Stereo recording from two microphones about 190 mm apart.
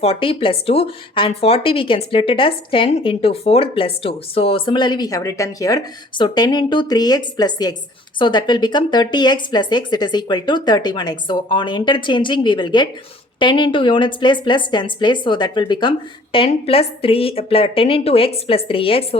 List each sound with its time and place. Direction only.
0.0 s speech: 30° left (ahead or behind)